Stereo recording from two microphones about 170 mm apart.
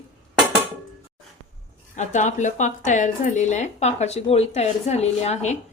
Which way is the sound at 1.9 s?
45° left (ahead or behind).